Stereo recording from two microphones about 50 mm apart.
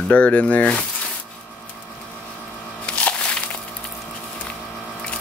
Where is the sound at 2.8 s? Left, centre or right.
Left.